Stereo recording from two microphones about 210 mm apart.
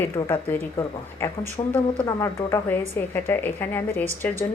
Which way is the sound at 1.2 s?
10° left (ahead or behind).